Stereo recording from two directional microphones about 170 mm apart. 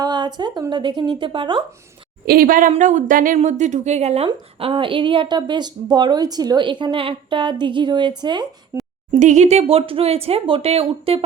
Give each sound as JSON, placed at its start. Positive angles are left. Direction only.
{"t": 0.0, "sound": "speech", "side_deg": -25}
{"t": 2.2, "sound": "speech", "side_deg": -60}
{"t": 9.1, "sound": "speech", "side_deg": -45}